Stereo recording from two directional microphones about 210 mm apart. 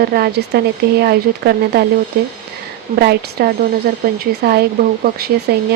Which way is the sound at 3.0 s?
50° right (ahead or behind).